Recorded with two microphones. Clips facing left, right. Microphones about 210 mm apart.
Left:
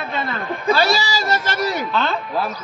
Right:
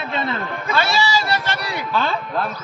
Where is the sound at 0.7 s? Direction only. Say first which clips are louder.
Left 2 dB; 35° left (ahead or behind).